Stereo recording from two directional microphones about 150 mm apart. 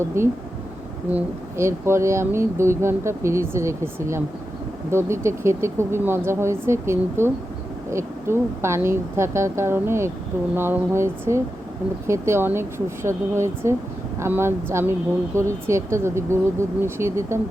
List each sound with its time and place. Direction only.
0.1 s speech: 20° right (ahead or behind)